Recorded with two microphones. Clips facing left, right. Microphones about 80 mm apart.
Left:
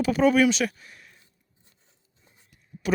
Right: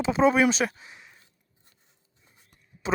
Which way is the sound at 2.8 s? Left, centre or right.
Right.